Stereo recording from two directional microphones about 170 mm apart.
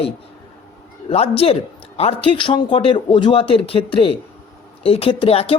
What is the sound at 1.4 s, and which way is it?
Speech, 35° left (ahead or behind).